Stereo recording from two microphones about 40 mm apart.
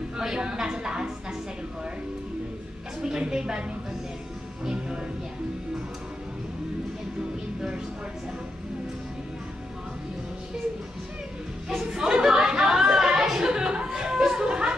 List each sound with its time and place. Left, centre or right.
0.2 s a woman's voice: centre
3.0 s a woman's voice: centre
4.6 s a woman's voice: centre
7.2 s music: centre
11.8 s chatter: centre